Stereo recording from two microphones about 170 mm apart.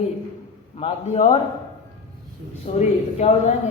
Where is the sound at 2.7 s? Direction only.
40° left (ahead or behind).